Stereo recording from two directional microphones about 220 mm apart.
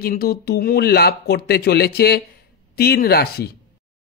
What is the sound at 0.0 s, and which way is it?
Speech, 45° left (ahead or behind).